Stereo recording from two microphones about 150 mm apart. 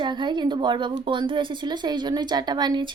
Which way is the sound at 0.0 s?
30° right (ahead or behind).